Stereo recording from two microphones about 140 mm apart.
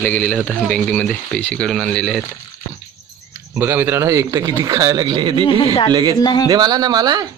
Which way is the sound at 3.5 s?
15° right (ahead or behind).